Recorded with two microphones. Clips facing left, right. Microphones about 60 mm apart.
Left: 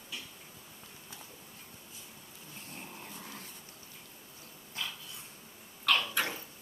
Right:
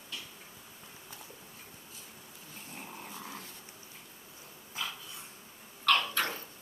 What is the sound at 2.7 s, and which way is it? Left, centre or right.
Dog, centre.